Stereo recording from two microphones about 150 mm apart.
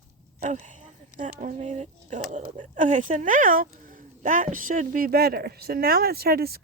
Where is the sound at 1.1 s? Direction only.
60° right (ahead or behind).